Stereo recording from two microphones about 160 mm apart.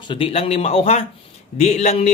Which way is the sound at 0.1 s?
35° left (ahead or behind).